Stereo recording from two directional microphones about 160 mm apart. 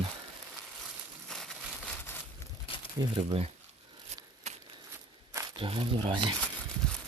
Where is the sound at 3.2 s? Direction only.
40° right (ahead or behind).